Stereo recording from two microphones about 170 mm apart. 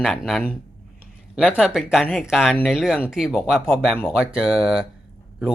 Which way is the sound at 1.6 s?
5° right (ahead or behind).